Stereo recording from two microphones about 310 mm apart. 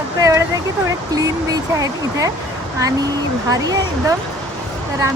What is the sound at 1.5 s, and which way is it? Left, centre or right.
Speech, centre.